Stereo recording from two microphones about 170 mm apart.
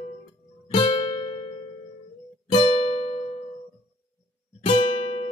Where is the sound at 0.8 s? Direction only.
30° left (ahead or behind).